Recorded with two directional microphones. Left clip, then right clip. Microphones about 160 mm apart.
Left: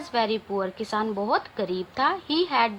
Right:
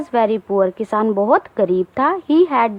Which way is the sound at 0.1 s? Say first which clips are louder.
Right 8 dB; 40° right (ahead or behind).